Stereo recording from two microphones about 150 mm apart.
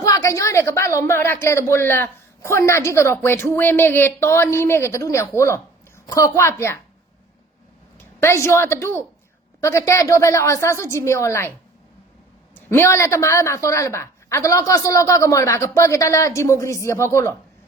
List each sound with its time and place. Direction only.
0.0 s a woman's voice: 20° left (ahead or behind)
7.9 s a woman's voice: 15° left (ahead or behind)
12.5 s a woman's voice: 15° left (ahead or behind)